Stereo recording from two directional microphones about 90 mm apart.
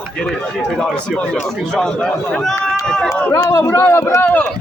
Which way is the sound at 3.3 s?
35° left (ahead or behind).